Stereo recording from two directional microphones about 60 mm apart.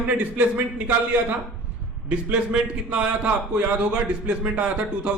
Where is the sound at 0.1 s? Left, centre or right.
Right.